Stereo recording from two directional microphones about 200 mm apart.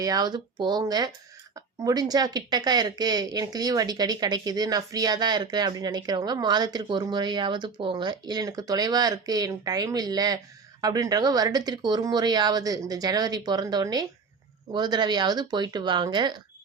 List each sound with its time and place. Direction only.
0.0 s speech: 20° right (ahead or behind)